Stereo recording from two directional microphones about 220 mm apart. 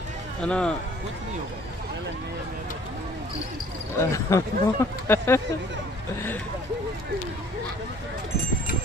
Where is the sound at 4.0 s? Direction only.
15° left (ahead or behind).